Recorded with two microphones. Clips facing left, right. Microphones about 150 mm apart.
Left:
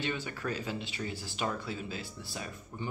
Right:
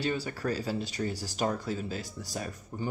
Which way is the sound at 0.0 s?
40° right (ahead or behind).